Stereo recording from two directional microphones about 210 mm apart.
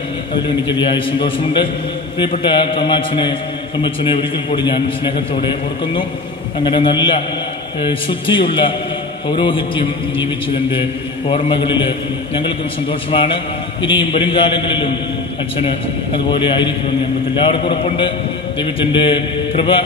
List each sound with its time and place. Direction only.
0.7 s a man's voice: 25° left (ahead or behind)
13.1 s a man's voice: 25° left (ahead or behind)